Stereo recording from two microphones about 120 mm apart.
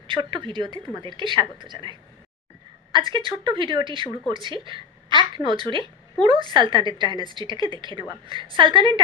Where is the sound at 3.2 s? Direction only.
45° right (ahead or behind).